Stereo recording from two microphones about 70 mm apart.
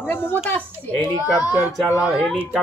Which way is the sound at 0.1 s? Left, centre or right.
Left.